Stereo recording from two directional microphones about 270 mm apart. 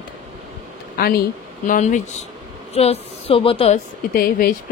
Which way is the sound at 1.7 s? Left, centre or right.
Left.